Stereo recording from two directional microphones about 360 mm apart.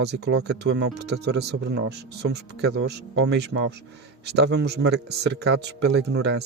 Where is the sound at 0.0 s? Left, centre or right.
Right.